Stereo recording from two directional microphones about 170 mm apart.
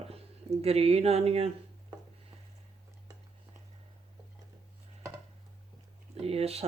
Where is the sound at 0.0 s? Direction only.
35° right (ahead or behind).